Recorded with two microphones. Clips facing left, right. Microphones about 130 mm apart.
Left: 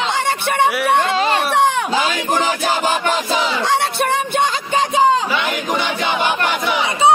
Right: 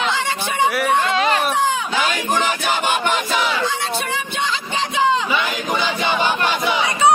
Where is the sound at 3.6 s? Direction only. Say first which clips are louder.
Left 5 dB; 65° left (ahead or behind); by 5.2 s 40° left (ahead or behind).